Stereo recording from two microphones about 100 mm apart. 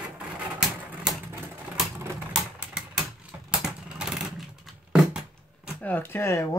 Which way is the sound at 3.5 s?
5° right (ahead or behind).